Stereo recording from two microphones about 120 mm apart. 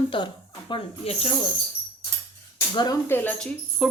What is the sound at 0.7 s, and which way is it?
Speech, 50° left (ahead or behind).